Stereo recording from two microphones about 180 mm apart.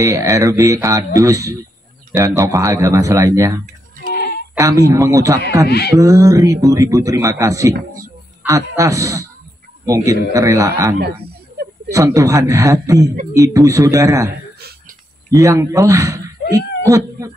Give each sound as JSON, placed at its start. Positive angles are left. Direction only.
{"t": 0.0, "sound": "speech", "side_deg": -15}
{"t": 4.1, "sound": "a sound", "side_deg": 60}
{"t": 4.6, "sound": "a man's voice", "side_deg": -15}
{"t": 15.3, "sound": "speech", "side_deg": -20}